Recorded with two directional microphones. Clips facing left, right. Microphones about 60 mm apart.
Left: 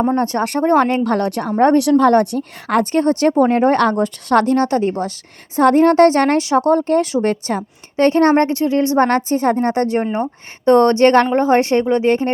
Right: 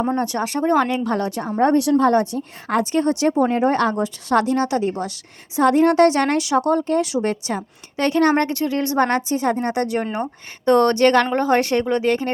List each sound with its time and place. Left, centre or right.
0.2 s speech: left
3.9 s a woman's voice: left
9.0 s a woman's voice: left